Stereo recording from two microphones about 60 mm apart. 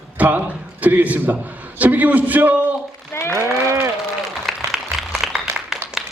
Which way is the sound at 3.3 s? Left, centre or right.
Right.